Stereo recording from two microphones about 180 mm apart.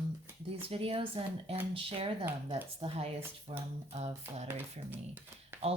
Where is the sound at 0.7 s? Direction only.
30° right (ahead or behind).